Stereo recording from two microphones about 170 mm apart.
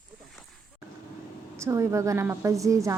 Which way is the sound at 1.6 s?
15° right (ahead or behind).